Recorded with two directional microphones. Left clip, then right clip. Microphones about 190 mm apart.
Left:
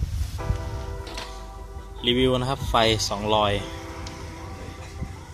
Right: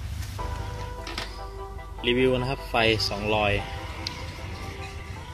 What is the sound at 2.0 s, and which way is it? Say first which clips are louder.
Speech: left 1 dB; 25° left (ahead or behind).